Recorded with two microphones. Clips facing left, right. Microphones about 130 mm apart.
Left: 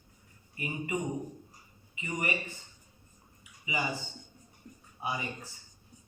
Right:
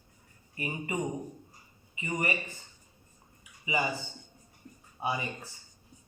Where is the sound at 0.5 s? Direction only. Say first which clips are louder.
Even; 35° right (ahead or behind).